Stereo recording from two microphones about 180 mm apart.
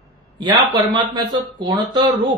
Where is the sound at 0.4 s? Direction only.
25° right (ahead or behind).